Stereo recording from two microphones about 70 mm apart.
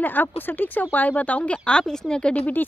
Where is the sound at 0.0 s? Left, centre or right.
Left.